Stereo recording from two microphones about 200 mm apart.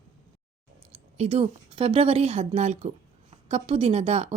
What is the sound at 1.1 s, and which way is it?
A woman's voice, 30° right (ahead or behind).